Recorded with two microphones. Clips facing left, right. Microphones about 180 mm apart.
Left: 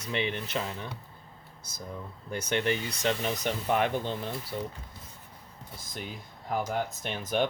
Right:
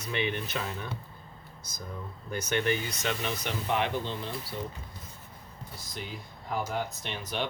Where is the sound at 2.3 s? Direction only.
30° left (ahead or behind); by 4.1 s 45° left (ahead or behind).